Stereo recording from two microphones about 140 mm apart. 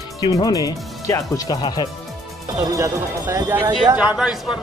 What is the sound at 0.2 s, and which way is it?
Speech, 25° left (ahead or behind).